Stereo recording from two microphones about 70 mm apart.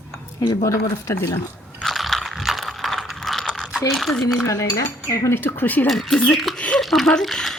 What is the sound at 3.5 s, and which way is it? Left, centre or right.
Mechanisms, centre.